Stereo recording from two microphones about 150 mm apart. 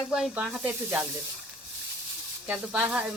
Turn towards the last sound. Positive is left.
turn(degrees=-10)  # may be behind; listen again after turning